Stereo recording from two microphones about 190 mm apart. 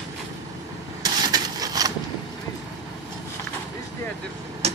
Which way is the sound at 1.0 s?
20° right (ahead or behind).